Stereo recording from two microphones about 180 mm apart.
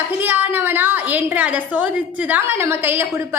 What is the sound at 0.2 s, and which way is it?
A woman's voice, 10° right (ahead or behind).